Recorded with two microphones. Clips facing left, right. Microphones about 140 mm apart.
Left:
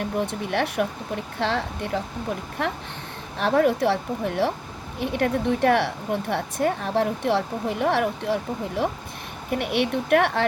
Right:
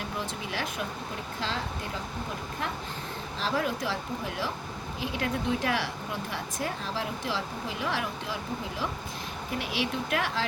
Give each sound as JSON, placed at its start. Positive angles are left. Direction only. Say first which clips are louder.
{"t": 0.0, "sound": "speech", "louder": "left 8 dB", "side_deg": 60}
{"t": 3.3, "sound": "speech", "louder": "left 10 dB", "side_deg": 60}